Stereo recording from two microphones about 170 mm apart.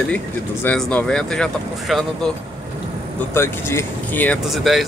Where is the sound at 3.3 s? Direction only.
15° left (ahead or behind).